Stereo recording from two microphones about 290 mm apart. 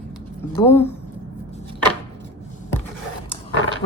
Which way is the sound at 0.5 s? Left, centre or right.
Centre.